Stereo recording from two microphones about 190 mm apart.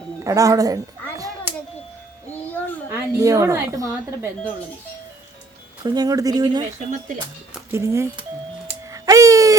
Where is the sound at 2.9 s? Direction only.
15° right (ahead or behind).